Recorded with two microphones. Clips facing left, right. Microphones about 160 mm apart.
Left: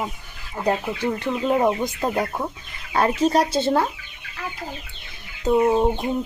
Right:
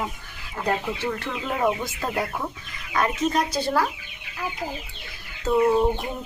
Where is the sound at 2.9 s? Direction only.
30° left (ahead or behind).